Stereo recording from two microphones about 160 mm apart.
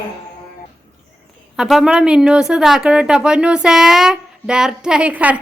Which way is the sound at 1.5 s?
5° right (ahead or behind).